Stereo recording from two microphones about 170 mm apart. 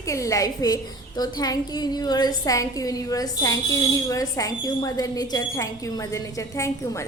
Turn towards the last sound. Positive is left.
turn(degrees=15)  # may be behind; listen again after turning